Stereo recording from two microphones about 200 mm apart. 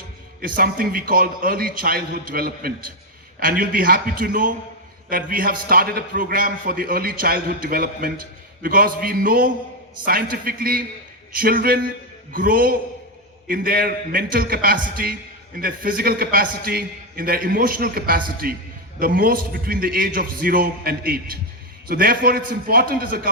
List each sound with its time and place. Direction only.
0.4 s a man's voice: 45° right (ahead or behind)